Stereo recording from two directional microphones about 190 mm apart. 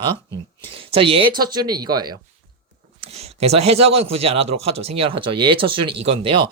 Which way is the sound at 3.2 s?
35° right (ahead or behind).